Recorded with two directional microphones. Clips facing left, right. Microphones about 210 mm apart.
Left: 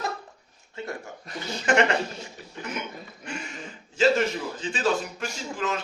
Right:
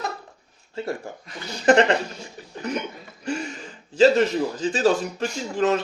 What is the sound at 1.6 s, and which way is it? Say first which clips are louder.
Speech: right 6 dB; 35° right (ahead or behind).